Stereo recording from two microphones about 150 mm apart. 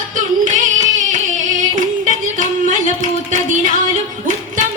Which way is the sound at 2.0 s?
55° right (ahead or behind).